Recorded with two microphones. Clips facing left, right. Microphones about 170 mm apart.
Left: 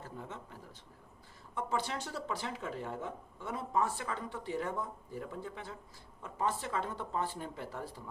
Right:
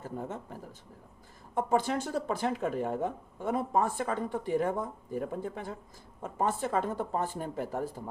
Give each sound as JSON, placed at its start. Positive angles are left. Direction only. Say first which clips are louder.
{"t": 0.2, "sound": "speech", "louder": "right 7 dB", "side_deg": -45}